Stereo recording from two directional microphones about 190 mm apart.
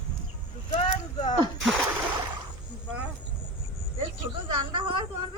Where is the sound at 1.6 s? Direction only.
Centre (ahead or behind).